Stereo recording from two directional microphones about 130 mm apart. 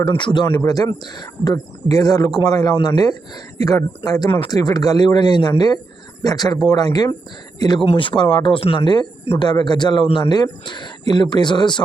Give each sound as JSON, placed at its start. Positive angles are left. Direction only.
{"t": 0.2, "sound": "a man's voice", "side_deg": 40}